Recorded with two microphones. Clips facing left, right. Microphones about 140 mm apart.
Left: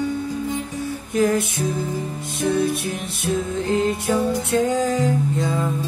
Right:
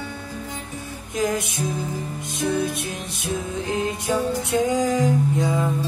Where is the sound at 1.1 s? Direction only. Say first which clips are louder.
Left 5 dB; 15° right (ahead or behind).